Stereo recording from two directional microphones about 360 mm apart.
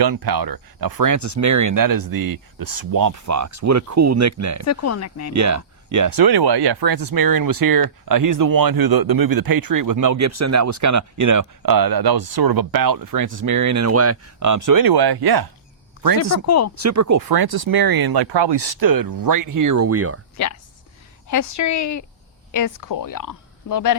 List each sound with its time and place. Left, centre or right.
0.0 s speech: right
4.6 s speech: left
5.3 s speech: right
16.0 s a sound: left
16.5 s speech: left
16.8 s speech: right
17.2 s speech: right
20.4 s speech: left